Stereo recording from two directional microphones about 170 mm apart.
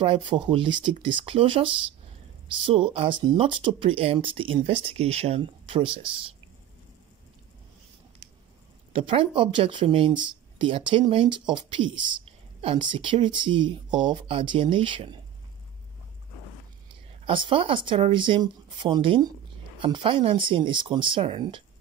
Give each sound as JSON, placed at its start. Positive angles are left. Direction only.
{"t": 0.0, "sound": "speech", "side_deg": -30}
{"t": 8.9, "sound": "speech", "side_deg": -30}
{"t": 17.3, "sound": "speech", "side_deg": -30}